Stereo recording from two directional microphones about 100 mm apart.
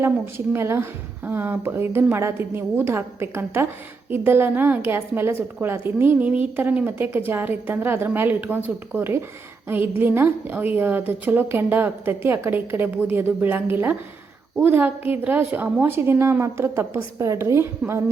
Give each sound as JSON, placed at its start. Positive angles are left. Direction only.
{"t": 0.0, "sound": "a woman's voice", "side_deg": -25}